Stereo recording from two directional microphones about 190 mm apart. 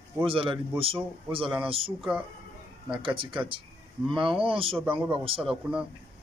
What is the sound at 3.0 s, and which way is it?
A man's voice, 25° right (ahead or behind).